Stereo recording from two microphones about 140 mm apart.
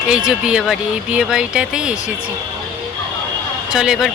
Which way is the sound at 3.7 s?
5° right (ahead or behind).